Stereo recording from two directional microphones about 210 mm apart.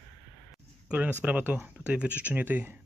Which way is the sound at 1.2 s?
5° right (ahead or behind).